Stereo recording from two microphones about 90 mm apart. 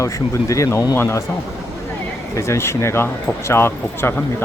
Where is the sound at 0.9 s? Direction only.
25° left (ahead or behind).